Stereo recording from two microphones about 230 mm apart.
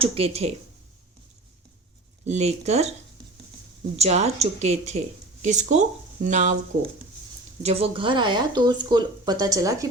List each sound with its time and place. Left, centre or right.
0.0 s speech: right
2.2 s speech: right
3.9 s speech: right